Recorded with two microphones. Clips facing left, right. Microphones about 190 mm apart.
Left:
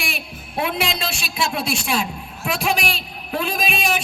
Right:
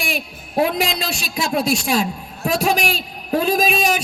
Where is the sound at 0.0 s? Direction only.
40° right (ahead or behind).